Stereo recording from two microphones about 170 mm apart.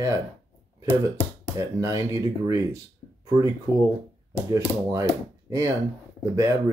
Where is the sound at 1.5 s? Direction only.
20° right (ahead or behind).